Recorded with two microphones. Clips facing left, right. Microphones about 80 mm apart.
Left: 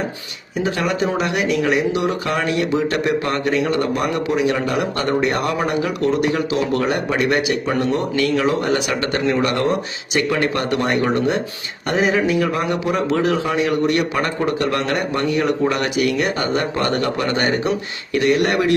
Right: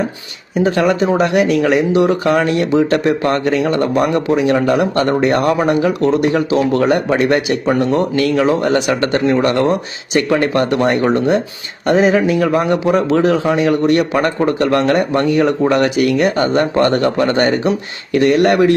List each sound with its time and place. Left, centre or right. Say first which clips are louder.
0.6 s speech: right 6 dB; right